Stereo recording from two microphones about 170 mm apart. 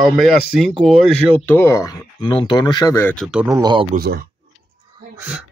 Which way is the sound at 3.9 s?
60° right (ahead or behind).